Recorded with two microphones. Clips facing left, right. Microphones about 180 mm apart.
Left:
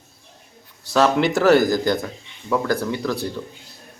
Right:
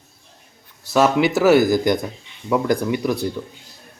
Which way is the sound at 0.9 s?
10° right (ahead or behind).